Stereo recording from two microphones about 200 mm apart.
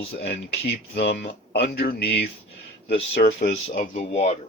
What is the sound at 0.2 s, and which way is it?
Speech, 55° left (ahead or behind).